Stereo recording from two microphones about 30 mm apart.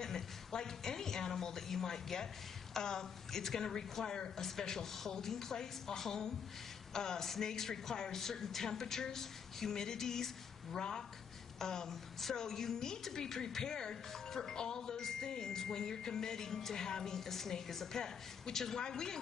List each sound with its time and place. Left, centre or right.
0.0 s a woman's voice: left
9.8 s a sound: centre
10.8 s a woman's voice: left
11.9 s speech: centre